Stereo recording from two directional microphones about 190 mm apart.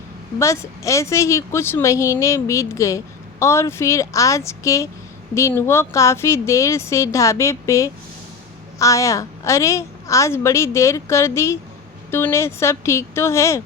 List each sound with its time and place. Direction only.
0.3 s a woman's voice: 15° left (ahead or behind)